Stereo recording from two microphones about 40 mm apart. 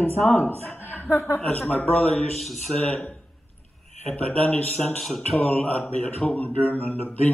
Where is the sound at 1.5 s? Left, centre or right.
Left.